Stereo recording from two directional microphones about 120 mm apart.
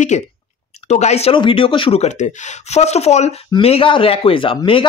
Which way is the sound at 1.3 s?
45° left (ahead or behind).